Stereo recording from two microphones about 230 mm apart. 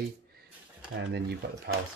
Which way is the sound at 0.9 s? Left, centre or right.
Right.